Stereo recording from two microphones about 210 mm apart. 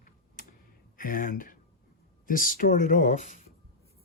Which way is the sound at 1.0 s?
40° left (ahead or behind).